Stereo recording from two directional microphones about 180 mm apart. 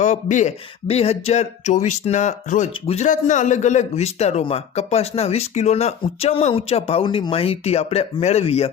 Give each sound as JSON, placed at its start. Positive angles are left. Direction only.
{"t": 0.0, "sound": "speech", "side_deg": 40}